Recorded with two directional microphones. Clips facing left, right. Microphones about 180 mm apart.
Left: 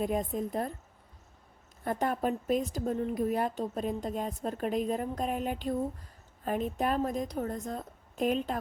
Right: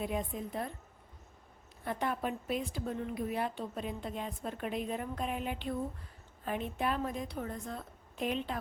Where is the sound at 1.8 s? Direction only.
45° left (ahead or behind).